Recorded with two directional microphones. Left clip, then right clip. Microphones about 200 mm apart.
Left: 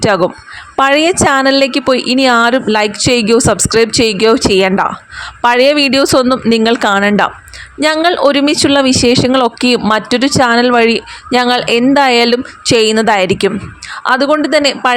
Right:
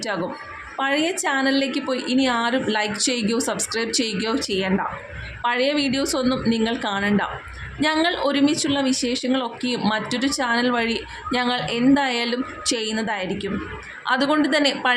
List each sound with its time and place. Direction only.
0.8 s speech: 45° left (ahead or behind)
14.0 s speech: 40° left (ahead or behind)